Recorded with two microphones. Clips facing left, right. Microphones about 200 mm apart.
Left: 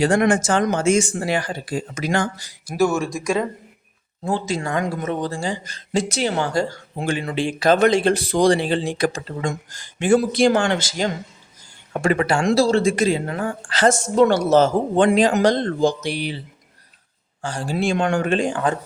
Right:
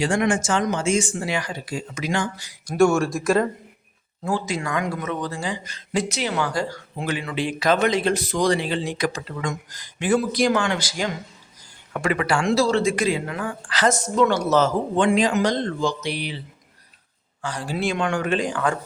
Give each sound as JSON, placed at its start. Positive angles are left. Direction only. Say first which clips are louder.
{"t": 0.1, "sound": "a woman's voice", "louder": "left 4 dB", "side_deg": 40}
{"t": 0.6, "sound": "speech", "louder": "left 4 dB", "side_deg": 60}
{"t": 0.9, "sound": "a woman's voice", "louder": "left 3 dB", "side_deg": 45}
{"t": 2.6, "sound": "speech", "louder": "right 2 dB", "side_deg": 0}
{"t": 4.3, "sound": "a woman's voice", "louder": "left 2 dB", "side_deg": 25}
{"t": 13.6, "sound": "a woman's voice", "louder": "left 3 dB", "side_deg": 30}
{"t": 17.4, "sound": "speech", "louder": "left 3 dB", "side_deg": 30}
{"t": 17.9, "sound": "a woman's voice", "louder": "left 5 dB", "side_deg": 40}
{"t": 18.3, "sound": "speech", "louder": "left 2 dB", "side_deg": 25}